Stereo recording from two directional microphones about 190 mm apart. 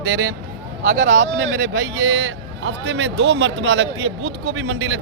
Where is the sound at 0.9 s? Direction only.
75° right (ahead or behind); by 5.0 s 90° right.